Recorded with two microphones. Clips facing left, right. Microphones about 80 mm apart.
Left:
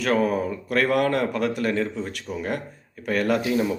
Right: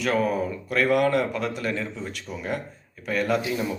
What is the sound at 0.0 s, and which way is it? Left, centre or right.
Speech, left.